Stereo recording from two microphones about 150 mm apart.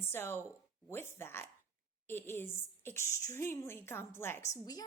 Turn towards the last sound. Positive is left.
turn(degrees=20)  # may be behind; listen again after turning